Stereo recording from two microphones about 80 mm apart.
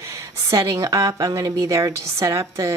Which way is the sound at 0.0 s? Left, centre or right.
Right.